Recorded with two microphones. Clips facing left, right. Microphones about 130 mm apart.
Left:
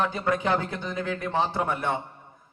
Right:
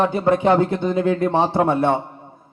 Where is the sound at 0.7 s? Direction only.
25° right (ahead or behind).